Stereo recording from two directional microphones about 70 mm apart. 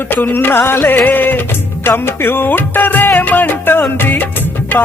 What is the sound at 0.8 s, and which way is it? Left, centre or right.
Music, left.